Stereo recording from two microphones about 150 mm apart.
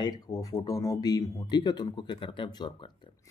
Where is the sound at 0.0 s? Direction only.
25° left (ahead or behind).